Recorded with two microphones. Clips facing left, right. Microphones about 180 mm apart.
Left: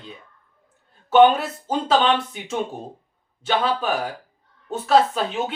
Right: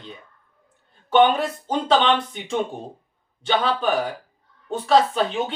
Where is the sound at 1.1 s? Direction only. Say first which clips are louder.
Left 3 dB; 5° left (ahead or behind).